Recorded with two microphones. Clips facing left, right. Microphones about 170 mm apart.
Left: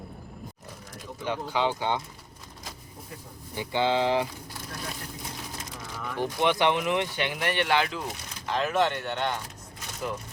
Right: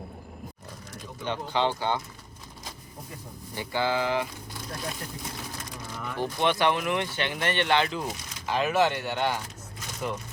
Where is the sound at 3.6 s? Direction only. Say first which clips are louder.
Left 2 dB; 20° left (ahead or behind).